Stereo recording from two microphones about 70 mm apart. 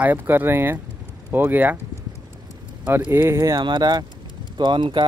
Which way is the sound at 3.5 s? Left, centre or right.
Right.